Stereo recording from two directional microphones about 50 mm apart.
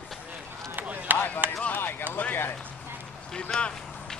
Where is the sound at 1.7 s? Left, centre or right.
Left.